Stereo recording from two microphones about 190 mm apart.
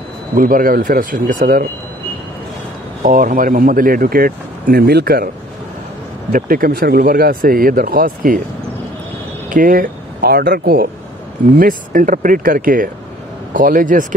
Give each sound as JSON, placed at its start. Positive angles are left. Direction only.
{"t": 0.3, "sound": "speech", "side_deg": -50}
{"t": 3.0, "sound": "speech", "side_deg": -45}
{"t": 6.3, "sound": "speech", "side_deg": -50}
{"t": 9.5, "sound": "speech", "side_deg": -45}